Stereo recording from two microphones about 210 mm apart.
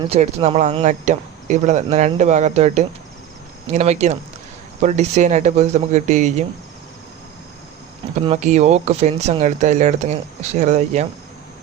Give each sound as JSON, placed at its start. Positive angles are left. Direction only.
{"t": 0.0, "sound": "speech", "side_deg": -30}
{"t": 8.1, "sound": "speech", "side_deg": -30}